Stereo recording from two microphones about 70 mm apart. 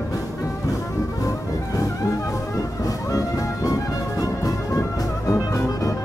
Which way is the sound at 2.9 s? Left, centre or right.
Left.